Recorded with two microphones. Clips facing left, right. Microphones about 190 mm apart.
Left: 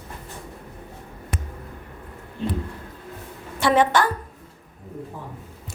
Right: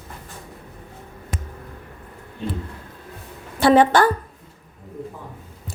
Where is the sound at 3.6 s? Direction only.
35° right (ahead or behind).